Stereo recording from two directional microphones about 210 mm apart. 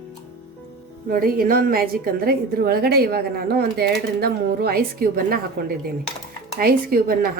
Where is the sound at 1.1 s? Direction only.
45° right (ahead or behind).